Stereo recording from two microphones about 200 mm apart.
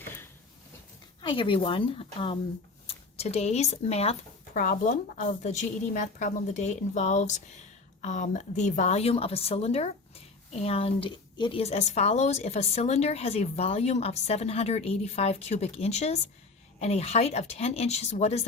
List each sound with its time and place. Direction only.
1.2 s speech: 25° left (ahead or behind)
4.5 s a woman's voice: 45° left (ahead or behind)